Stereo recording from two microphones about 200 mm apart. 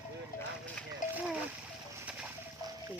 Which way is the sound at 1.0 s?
40° left (ahead or behind).